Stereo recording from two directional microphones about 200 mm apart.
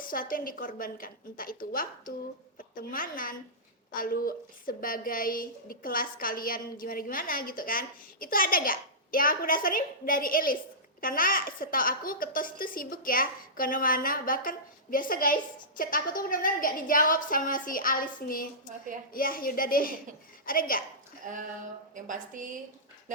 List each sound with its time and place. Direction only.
0.0 s a woman's voice: 45° left (ahead or behind)
21.2 s a woman's voice: 40° right (ahead or behind)